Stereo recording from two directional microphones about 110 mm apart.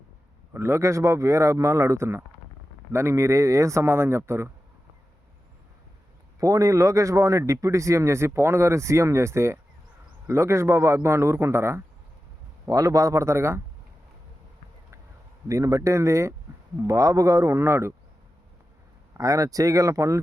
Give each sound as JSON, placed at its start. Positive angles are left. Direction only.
{"t": 0.5, "sound": "speech", "side_deg": -25}
{"t": 6.4, "sound": "speech", "side_deg": -30}
{"t": 15.4, "sound": "speech", "side_deg": -30}
{"t": 19.1, "sound": "speech", "side_deg": -30}